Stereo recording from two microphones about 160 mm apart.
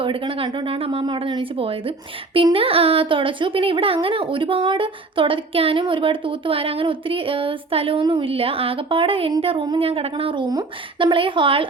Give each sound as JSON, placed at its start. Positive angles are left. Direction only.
{"t": 0.0, "sound": "speech", "side_deg": -35}